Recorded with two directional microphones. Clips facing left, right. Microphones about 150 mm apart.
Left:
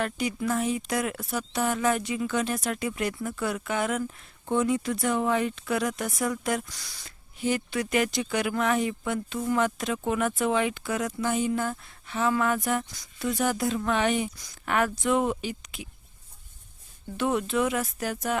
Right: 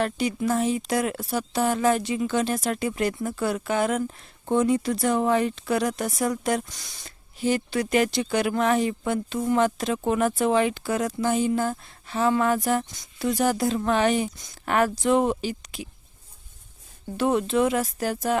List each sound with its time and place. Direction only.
0.0 s speech: 30° right (ahead or behind)
6.7 s speech: 20° right (ahead or behind)
17.2 s speech: 30° right (ahead or behind)